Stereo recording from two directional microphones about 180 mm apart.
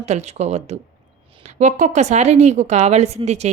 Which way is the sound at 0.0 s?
40° right (ahead or behind).